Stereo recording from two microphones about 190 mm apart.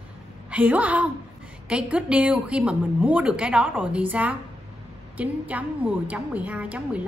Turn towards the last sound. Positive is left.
turn(degrees=-5)  # may be behind; listen again after turning